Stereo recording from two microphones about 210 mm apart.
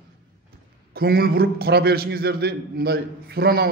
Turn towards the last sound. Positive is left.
turn(degrees=-50)  # may be behind; listen again after turning